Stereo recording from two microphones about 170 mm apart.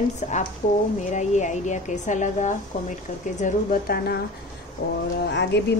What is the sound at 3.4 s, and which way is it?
A woman's voice, 55° left (ahead or behind).